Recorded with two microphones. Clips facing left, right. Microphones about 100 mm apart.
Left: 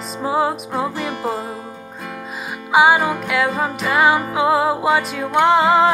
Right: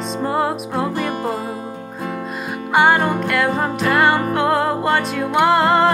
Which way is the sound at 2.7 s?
5° left (ahead or behind).